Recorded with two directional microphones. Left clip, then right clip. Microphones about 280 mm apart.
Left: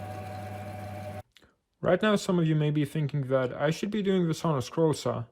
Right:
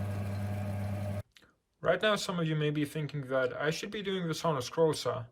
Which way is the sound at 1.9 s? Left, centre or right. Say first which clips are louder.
Left 4 dB; centre.